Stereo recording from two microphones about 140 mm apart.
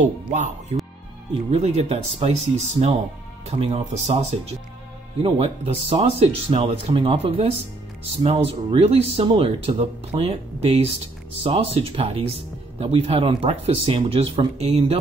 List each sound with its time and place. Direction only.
0.3 s speech: 60° right (ahead or behind)
1.5 s speech: 45° right (ahead or behind)